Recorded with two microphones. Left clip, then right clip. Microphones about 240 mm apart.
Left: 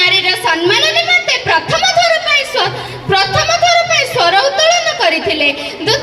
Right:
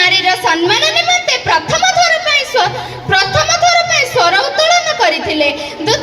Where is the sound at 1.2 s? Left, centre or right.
Right.